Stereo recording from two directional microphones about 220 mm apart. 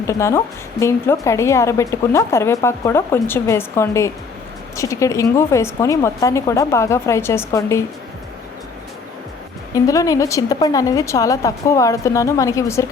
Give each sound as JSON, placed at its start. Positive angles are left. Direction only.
{"t": 0.1, "sound": "a woman's voice", "side_deg": 10}
{"t": 9.7, "sound": "a woman's voice", "side_deg": 15}